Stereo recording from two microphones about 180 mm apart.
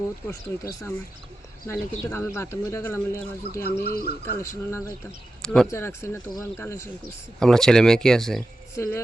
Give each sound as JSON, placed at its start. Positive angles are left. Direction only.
{"t": 0.3, "sound": "speech", "side_deg": 20}
{"t": 3.8, "sound": "speech", "side_deg": 55}
{"t": 4.3, "sound": "speech", "side_deg": 15}
{"t": 5.4, "sound": "speech", "side_deg": 5}
{"t": 5.7, "sound": "speech", "side_deg": 15}
{"t": 7.3, "sound": "speech", "side_deg": 5}
{"t": 8.8, "sound": "speech", "side_deg": 15}